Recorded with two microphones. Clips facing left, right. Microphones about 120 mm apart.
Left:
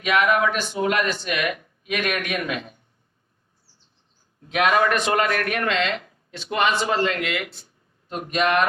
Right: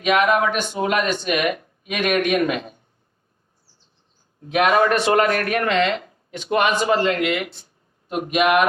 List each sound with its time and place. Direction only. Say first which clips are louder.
0.0 s speech: right 2 dB; 20° right (ahead or behind)
4.5 s speech: right 3 dB; 30° right (ahead or behind)
7.0 s a man's voice: right 4 dB; 25° right (ahead or behind)